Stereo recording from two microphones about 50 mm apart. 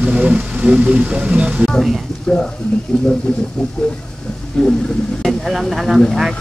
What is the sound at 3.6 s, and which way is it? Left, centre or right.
Speech, centre.